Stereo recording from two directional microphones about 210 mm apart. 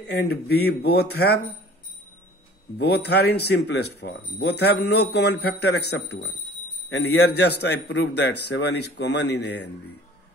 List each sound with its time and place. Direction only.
0.0 s a man's voice: 50° left (ahead or behind)
2.8 s a man's voice: 50° left (ahead or behind)